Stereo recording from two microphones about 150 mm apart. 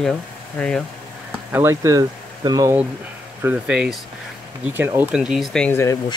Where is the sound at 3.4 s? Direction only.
10° right (ahead or behind).